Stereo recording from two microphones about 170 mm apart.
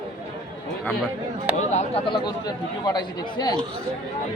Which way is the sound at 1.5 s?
40° left (ahead or behind).